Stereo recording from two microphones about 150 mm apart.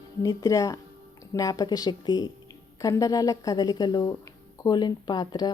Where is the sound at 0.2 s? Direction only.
20° left (ahead or behind).